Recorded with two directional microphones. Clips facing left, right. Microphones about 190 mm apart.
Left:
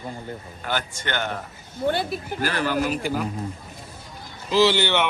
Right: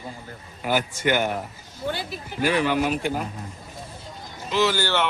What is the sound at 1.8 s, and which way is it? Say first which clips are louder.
Speech: left 6 dB; 55° left (ahead or behind).